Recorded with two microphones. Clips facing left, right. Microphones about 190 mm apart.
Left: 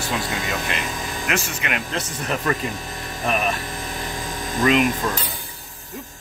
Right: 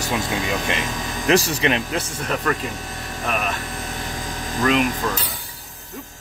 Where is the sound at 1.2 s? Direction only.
35° right (ahead or behind).